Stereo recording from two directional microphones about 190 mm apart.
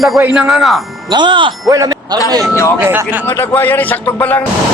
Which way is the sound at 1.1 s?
25° right (ahead or behind).